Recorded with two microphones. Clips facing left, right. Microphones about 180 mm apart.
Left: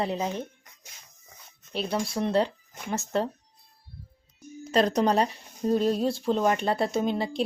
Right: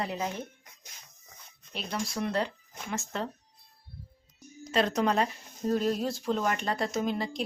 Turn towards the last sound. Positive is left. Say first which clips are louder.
# left 4 dB
turn(degrees=30)  # may be behind; listen again after turning